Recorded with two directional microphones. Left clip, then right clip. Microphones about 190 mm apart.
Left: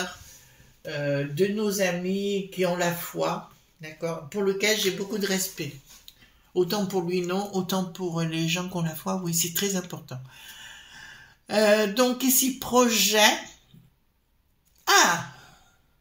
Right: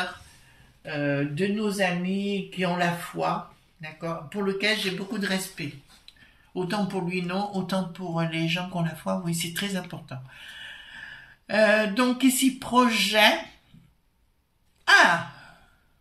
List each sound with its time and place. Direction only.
0.8 s speech: 45° left (ahead or behind)
6.5 s speech: 40° left (ahead or behind)
11.4 s speech: 50° left (ahead or behind)